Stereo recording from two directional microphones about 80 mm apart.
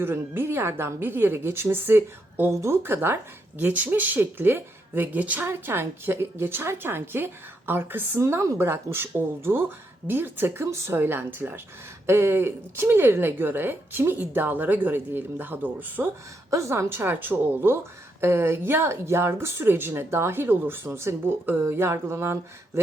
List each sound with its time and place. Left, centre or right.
0.0 s speech: right
2.5 s speech: right
2.8 s speech: right
16.5 s speech: right